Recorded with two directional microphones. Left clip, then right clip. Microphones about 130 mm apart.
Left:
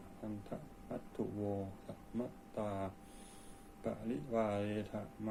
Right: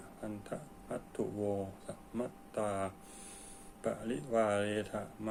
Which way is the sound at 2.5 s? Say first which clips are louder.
Right 5 dB; 25° right (ahead or behind).